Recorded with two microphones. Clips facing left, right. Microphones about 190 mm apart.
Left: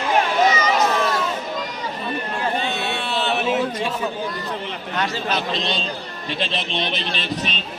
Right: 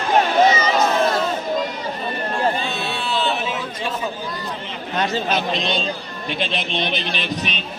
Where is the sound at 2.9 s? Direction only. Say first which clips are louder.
Right 1 dB; 60° left (ahead or behind).